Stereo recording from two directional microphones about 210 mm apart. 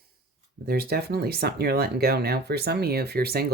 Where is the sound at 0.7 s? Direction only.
45° right (ahead or behind).